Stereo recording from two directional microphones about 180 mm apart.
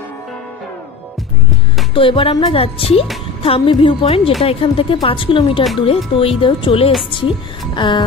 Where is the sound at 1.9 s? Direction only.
30° left (ahead or behind).